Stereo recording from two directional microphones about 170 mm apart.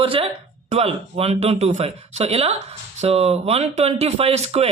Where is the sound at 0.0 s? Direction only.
30° right (ahead or behind).